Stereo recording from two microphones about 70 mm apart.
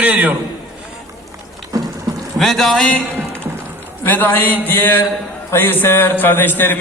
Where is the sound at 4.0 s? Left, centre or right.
Left.